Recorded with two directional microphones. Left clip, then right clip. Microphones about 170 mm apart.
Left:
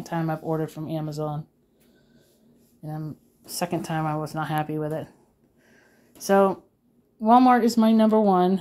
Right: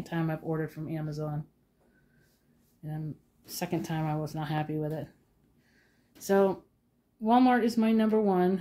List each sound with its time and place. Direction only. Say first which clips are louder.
0.0 s speech: left 6 dB; 20° left (ahead or behind)
2.8 s a woman's voice: left 6 dB; 20° left (ahead or behind)
6.2 s a woman's voice: left 6 dB; 15° left (ahead or behind); by 8.5 s 30° left (ahead or behind)